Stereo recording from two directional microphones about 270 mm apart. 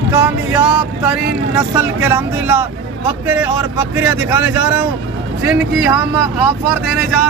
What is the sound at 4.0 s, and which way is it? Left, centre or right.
Speech, centre.